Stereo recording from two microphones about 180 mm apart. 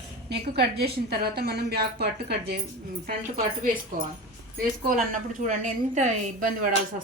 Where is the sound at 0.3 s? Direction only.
65° right (ahead or behind).